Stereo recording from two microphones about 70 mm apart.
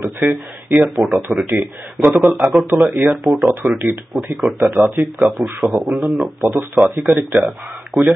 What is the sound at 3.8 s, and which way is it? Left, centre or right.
Speech, centre.